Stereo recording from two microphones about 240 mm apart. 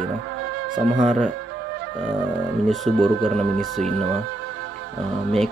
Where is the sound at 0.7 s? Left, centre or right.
Centre.